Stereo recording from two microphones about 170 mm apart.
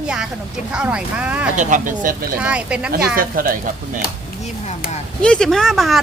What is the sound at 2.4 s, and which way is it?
Speech, 5° right (ahead or behind).